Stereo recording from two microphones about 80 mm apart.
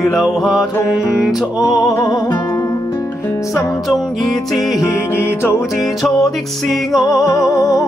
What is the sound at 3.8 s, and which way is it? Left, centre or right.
Music, centre.